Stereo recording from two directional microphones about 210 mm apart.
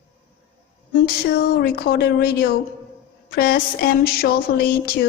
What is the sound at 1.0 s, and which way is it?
Speech, 50° left (ahead or behind).